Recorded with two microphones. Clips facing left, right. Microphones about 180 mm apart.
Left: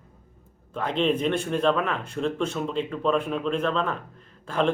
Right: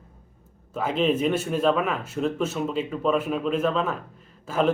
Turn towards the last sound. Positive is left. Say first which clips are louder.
# right 1 dB
turn(degrees=-5)  # may be behind; listen again after turning